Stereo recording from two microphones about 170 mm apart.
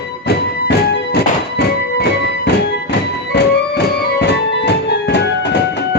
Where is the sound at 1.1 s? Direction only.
75° left (ahead or behind).